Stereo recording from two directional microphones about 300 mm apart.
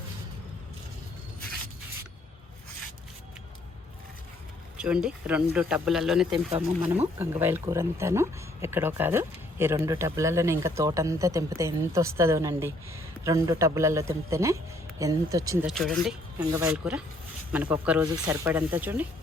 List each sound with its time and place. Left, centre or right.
4.8 s speech: centre
15.7 s speech: centre